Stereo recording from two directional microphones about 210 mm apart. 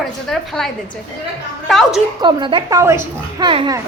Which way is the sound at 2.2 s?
20° right (ahead or behind).